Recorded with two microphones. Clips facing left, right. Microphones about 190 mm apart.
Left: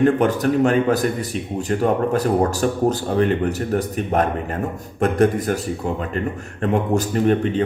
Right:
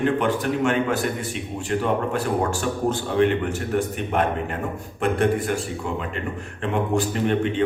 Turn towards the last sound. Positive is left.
turn(degrees=40)  # may be behind; listen again after turning